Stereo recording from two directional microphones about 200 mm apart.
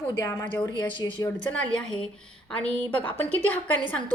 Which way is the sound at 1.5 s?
5° left (ahead or behind).